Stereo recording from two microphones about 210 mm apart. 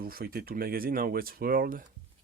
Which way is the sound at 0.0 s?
45° right (ahead or behind).